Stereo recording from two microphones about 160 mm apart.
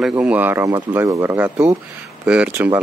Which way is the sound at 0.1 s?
10° right (ahead or behind).